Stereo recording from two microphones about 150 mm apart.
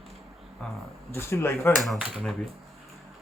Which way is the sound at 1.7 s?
Centre (ahead or behind).